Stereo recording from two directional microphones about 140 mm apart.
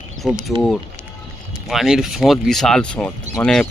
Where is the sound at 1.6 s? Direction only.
Centre (ahead or behind).